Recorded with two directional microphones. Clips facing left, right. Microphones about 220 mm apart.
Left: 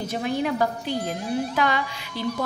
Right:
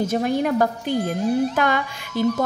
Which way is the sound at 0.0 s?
45° right (ahead or behind).